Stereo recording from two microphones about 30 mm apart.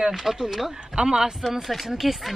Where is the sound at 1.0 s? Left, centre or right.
Right.